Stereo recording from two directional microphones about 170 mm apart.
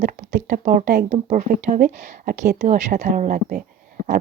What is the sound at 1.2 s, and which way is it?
Speech, 50° right (ahead or behind).